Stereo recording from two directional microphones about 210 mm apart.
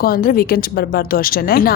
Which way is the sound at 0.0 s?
45° left (ahead or behind).